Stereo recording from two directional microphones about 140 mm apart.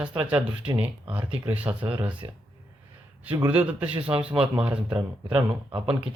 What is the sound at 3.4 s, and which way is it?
Speech, 10° right (ahead or behind).